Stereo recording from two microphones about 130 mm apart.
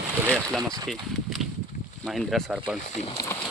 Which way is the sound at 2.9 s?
60° left (ahead or behind).